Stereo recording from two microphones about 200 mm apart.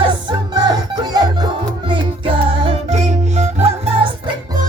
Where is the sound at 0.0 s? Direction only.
20° right (ahead or behind).